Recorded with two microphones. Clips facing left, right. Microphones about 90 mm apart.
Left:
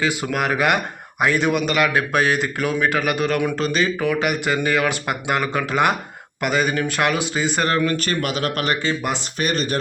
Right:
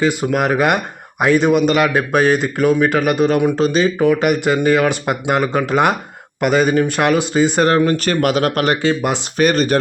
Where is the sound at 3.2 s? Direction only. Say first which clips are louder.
Right 6 dB; 30° right (ahead or behind).